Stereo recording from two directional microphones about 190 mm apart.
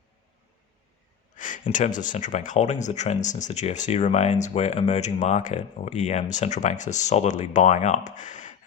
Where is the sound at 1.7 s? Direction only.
40° left (ahead or behind).